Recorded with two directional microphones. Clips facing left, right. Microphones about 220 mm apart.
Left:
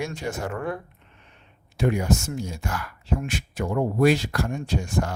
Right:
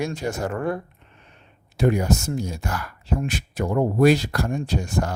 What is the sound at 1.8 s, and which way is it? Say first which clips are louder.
Speech: right 2 dB; 40° right (ahead or behind).